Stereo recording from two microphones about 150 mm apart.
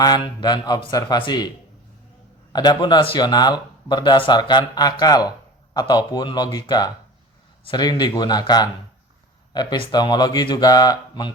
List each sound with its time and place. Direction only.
0.0 s speech: 25° left (ahead or behind)
2.5 s speech: 30° left (ahead or behind)